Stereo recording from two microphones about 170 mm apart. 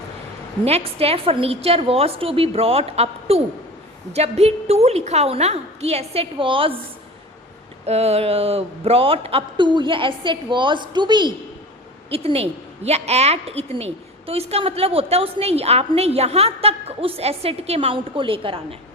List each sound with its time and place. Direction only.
0.6 s a woman's voice: 35° right (ahead or behind)
7.9 s a woman's voice: 40° right (ahead or behind)